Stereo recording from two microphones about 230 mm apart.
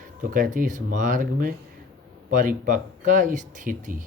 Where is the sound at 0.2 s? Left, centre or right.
Right.